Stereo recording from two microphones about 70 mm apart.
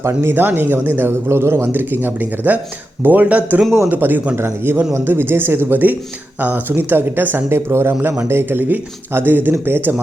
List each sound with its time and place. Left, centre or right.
0.0 s speech: right